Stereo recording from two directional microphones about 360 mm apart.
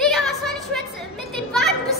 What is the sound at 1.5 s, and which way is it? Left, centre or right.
Children playing, centre.